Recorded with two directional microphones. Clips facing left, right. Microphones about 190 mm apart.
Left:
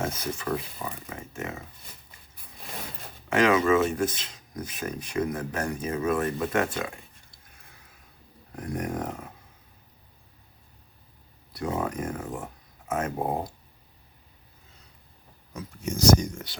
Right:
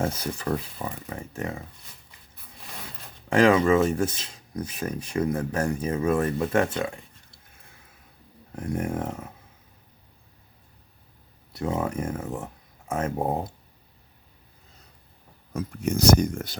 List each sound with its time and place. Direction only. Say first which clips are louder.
0.0 s speech: right 3 dB; 30° right (ahead or behind)
3.2 s speech: right 3 dB; 30° right (ahead or behind)
8.5 s speech: right 3 dB; 25° right (ahead or behind)
11.5 s speech: right 2 dB; 25° right (ahead or behind)
15.5 s speech: right 6 dB; 60° right (ahead or behind)